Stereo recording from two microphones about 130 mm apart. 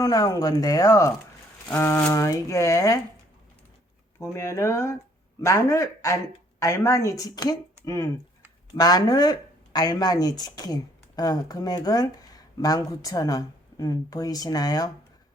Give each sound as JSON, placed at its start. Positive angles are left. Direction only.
{"t": 0.0, "sound": "speech", "side_deg": 30}
{"t": 4.2, "sound": "speech", "side_deg": 20}